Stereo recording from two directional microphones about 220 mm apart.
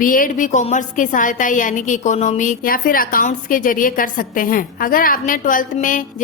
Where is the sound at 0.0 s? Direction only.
40° left (ahead or behind).